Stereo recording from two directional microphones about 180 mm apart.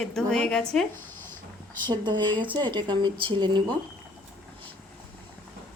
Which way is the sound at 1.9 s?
25° right (ahead or behind).